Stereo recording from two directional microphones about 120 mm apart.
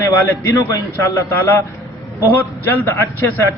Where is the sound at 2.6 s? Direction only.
20° left (ahead or behind).